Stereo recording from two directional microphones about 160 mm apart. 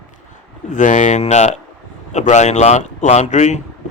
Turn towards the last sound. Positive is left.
turn(degrees=45)  # may be behind; listen again after turning